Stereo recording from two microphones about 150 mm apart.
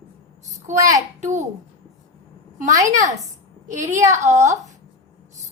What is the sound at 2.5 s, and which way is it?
A woman's voice, 55° right (ahead or behind).